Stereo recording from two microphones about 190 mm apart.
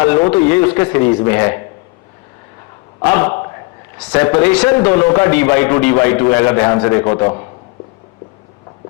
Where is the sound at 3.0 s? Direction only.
10° left (ahead or behind).